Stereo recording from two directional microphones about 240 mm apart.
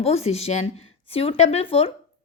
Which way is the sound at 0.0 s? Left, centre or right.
Left.